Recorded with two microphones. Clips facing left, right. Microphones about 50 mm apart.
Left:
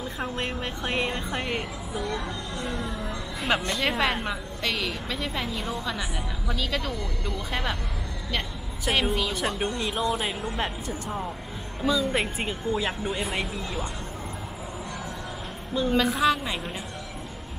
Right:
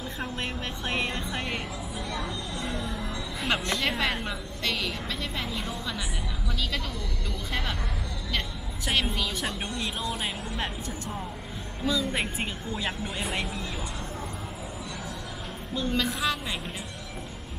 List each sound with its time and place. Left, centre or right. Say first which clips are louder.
0.2 s a woman's voice: left 3 dB; centre
2.1 s speech: left 1 dB; left
3.3 s a woman's voice: left 2 dB; centre
8.8 s a woman's voice: left 3 dB; centre
15.7 s a woman's voice: left 5 dB; centre